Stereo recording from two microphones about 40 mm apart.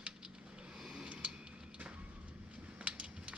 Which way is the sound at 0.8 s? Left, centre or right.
Centre.